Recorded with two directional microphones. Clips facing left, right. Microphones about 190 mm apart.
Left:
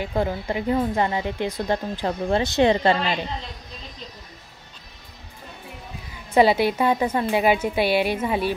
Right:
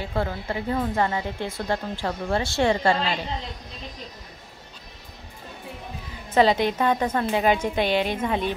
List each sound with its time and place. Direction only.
0.0 s speech: 15° left (ahead or behind)
6.3 s speech: 10° left (ahead or behind)